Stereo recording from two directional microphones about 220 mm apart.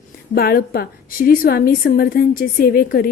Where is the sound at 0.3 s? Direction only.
45° left (ahead or behind).